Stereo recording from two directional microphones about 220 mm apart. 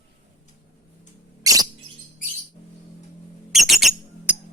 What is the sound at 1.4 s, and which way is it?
Rodents, 15° right (ahead or behind).